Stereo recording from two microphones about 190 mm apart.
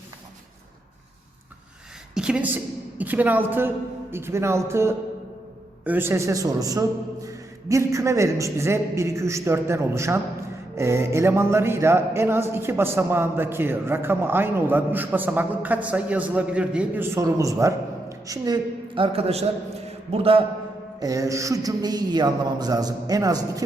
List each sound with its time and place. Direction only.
2.1 s a woman's voice: 5° right (ahead or behind); by 20.4 s 30° right (ahead or behind)
21.0 s a man's voice: 20° right (ahead or behind)